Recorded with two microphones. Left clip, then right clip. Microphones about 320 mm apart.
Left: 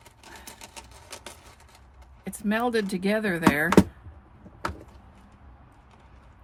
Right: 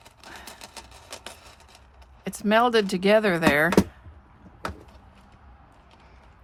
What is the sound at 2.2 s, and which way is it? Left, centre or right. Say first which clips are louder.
Speech: right 7 dB; centre.